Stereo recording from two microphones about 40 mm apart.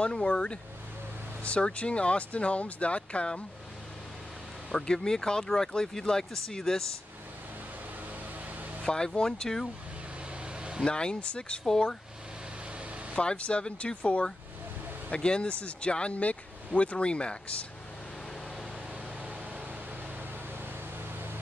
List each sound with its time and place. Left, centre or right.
0.0 s speech: left
4.6 s speech: centre
8.8 s speech: centre
10.4 s vehicle: right
10.9 s speech: left
11.6 s speech: centre
13.1 s speech: left